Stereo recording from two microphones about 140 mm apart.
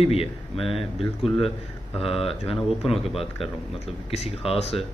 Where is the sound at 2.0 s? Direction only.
40° left (ahead or behind).